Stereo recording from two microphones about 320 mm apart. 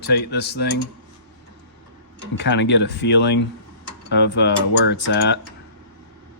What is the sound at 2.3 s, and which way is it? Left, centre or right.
Mechanisms, left.